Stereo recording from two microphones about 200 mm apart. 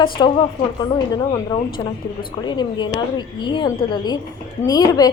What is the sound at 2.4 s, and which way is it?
Speech, 20° left (ahead or behind).